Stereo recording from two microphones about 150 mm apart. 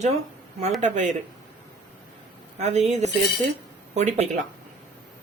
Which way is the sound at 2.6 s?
50° right (ahead or behind).